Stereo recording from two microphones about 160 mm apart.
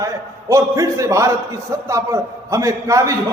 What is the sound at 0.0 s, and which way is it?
A man's voice, 20° right (ahead or behind).